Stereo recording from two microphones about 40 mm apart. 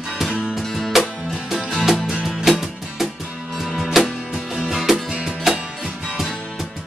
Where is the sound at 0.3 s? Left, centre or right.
Right.